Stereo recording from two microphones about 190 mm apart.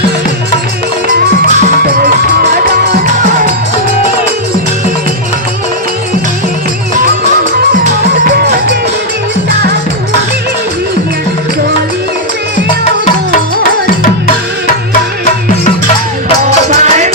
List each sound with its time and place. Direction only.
1.9 s music: 50° right (ahead or behind)
8.3 s music: 55° right (ahead or behind)
16.4 s music: 40° right (ahead or behind)